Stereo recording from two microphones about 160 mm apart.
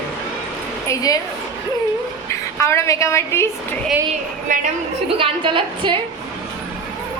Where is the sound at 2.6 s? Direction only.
20° left (ahead or behind).